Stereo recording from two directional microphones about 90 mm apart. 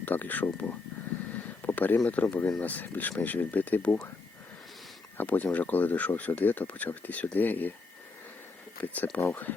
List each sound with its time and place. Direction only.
0.0 s speech: 20° left (ahead or behind)
1.6 s a sound: 20° left (ahead or behind)
2.0 s speech: 15° left (ahead or behind)
5.1 s speech: 20° left (ahead or behind)
8.8 s speech: 15° left (ahead or behind)